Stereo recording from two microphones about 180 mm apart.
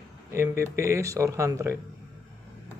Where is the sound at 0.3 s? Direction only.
15° right (ahead or behind).